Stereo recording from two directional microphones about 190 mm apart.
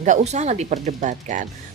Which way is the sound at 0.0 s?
40° right (ahead or behind).